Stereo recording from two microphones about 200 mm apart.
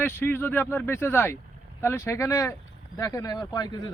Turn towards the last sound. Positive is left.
turn(degrees=20)  # may be behind; listen again after turning